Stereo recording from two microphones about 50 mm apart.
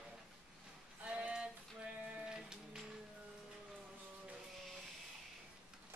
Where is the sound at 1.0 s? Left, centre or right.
Right.